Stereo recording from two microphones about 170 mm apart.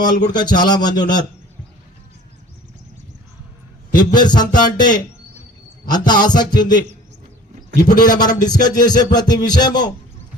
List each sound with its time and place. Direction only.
0.3 s music: 25° left (ahead or behind)
3.9 s music: 25° left (ahead or behind)
5.9 s music: 25° left (ahead or behind)
7.9 s music: 25° left (ahead or behind)